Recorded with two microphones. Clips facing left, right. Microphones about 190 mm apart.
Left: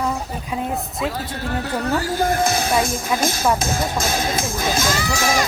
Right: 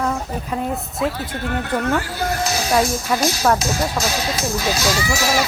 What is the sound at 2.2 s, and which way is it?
Speech, 55° left (ahead or behind).